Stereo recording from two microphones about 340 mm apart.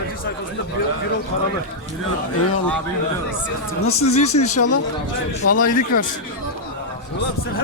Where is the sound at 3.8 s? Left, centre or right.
Centre.